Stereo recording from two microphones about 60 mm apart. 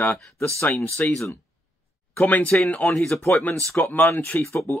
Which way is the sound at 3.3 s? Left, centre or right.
Left.